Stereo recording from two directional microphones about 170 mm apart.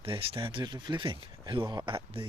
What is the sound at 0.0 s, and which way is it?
Speech, 30° right (ahead or behind).